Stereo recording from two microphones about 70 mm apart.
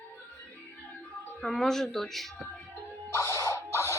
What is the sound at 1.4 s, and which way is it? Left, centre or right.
Speech, centre.